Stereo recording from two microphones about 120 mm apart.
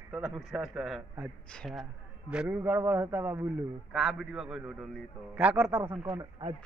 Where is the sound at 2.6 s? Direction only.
20° right (ahead or behind).